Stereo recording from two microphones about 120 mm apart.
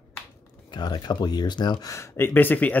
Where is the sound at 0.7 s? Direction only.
35° left (ahead or behind); by 2.7 s 15° left (ahead or behind).